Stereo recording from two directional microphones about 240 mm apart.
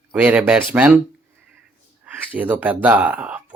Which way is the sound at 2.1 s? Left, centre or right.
Centre.